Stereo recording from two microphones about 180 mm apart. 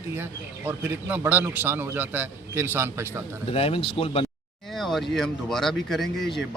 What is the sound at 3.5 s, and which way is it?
Speech, 30° left (ahead or behind).